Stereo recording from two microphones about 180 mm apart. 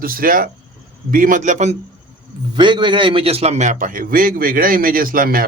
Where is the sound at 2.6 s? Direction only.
25° right (ahead or behind).